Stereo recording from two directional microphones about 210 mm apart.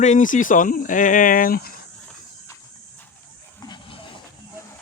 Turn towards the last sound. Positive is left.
turn(degrees=25)  # may be behind; listen again after turning